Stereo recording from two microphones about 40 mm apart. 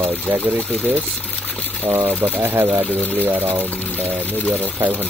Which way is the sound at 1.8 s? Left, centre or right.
Right.